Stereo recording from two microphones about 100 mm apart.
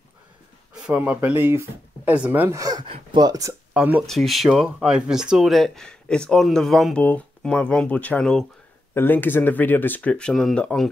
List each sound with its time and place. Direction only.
0.8 s speech: 15° right (ahead or behind)
2.5 s speech: 40° right (ahead or behind)
2.8 s speech: 55° right (ahead or behind)
3.7 s speech: 15° right (ahead or behind)
4.0 s speech: 5° left (ahead or behind)
7.0 s speech: 15° left (ahead or behind)
8.9 s speech: 20° left (ahead or behind)